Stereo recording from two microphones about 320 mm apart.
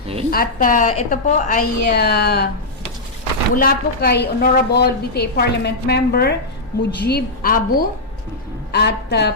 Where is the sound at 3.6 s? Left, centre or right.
Left.